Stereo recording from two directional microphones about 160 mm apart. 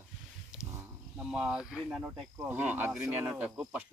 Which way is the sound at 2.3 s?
15° right (ahead or behind).